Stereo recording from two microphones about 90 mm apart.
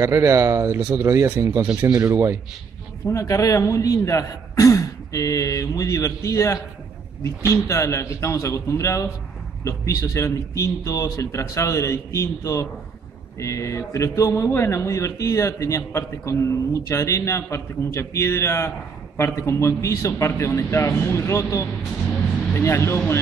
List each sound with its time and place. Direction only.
0.0 s speech: 35° right (ahead or behind)
3.1 s speech: 35° left (ahead or behind)